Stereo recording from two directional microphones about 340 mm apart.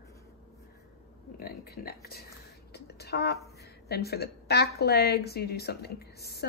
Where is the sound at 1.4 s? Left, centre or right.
Left.